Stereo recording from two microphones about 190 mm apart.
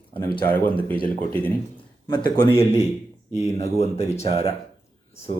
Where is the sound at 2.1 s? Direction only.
30° left (ahead or behind).